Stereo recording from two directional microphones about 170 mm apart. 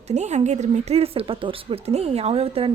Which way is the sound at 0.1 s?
40° right (ahead or behind).